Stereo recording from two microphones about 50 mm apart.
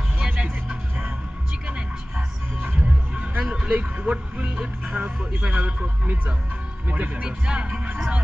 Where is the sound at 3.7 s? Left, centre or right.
Right.